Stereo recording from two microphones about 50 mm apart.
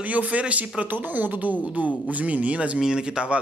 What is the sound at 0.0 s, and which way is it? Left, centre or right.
Speech, right.